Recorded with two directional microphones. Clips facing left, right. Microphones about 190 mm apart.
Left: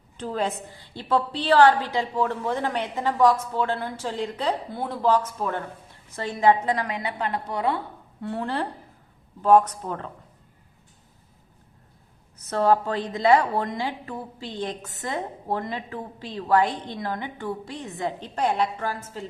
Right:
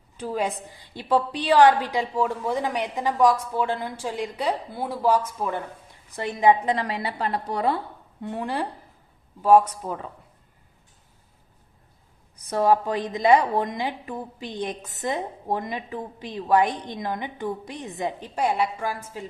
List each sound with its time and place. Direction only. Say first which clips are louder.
0.2 s a woman's voice: even; 10° right (ahead or behind)
6.8 s a woman's voice: right 1 dB; 35° right (ahead or behind)
8.2 s a woman's voice: even; 15° right (ahead or behind)
12.4 s a woman's voice: even; 10° right (ahead or behind)